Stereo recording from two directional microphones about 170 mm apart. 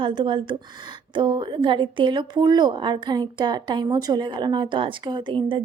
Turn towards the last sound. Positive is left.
turn(degrees=-30)  # may be behind; listen again after turning